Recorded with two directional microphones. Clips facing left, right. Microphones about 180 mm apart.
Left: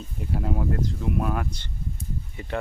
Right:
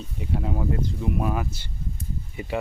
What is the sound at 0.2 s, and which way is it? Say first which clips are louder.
Speech: even; centre (ahead or behind).